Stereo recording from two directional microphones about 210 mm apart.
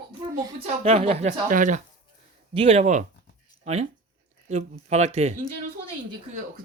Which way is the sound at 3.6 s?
30° right (ahead or behind).